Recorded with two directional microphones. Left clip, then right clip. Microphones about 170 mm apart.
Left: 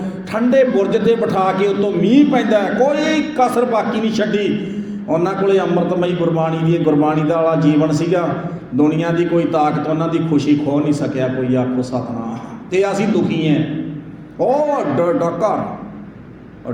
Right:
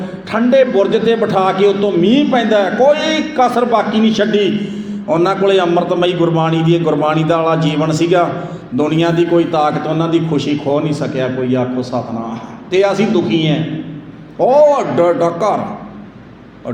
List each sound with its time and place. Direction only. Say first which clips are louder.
0.3 s a man's voice: right 3 dB; 25° right (ahead or behind)